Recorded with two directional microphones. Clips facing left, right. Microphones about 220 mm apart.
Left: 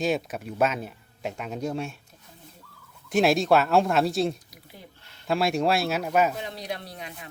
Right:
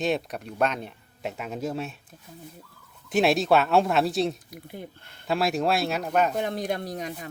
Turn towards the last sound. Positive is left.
turn(degrees=-45)  # may be behind; listen again after turning